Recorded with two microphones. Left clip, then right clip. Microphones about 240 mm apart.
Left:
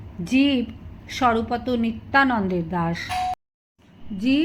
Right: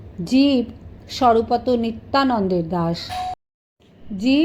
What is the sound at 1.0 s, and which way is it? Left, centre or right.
Speech, right.